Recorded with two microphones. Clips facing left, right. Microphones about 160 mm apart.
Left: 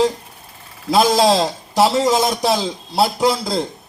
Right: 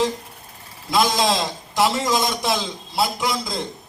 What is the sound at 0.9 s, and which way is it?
A man's voice, 35° left (ahead or behind).